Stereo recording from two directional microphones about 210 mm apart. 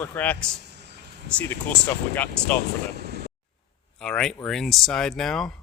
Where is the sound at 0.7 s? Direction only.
55° right (ahead or behind).